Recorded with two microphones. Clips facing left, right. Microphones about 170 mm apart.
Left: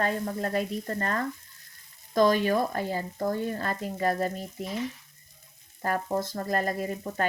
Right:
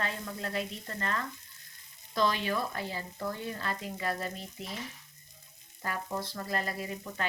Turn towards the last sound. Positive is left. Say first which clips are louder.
# left 7 dB
turn(degrees=45)  # may be behind; listen again after turning